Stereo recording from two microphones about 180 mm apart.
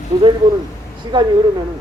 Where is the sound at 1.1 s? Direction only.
25° right (ahead or behind).